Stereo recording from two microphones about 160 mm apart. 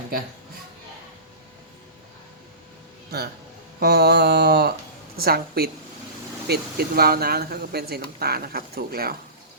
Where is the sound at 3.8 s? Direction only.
85° right.